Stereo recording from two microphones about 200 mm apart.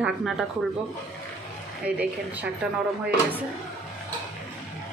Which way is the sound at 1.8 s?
5° right (ahead or behind).